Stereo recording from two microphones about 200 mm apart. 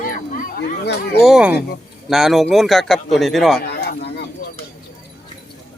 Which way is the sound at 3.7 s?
55° left (ahead or behind).